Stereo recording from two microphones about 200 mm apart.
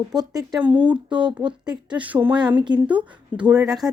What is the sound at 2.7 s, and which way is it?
Speech, 20° right (ahead or behind).